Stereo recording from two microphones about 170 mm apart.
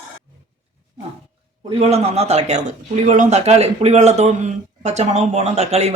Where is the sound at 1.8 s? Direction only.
40° right (ahead or behind).